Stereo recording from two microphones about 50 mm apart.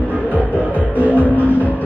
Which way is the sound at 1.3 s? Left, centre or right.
Left.